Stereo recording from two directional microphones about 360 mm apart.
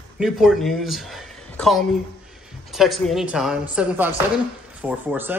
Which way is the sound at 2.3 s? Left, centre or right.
Centre.